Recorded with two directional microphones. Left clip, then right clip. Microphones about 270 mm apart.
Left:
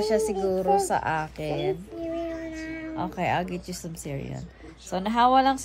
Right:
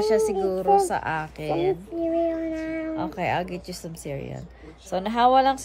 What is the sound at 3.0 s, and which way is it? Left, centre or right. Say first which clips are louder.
Speech: left 1 dB; centre.